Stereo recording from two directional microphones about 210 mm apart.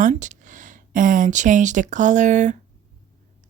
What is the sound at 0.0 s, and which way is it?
Speech, 35° right (ahead or behind).